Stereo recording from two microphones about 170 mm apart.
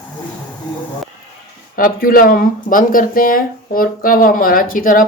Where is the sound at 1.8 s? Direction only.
55° left (ahead or behind).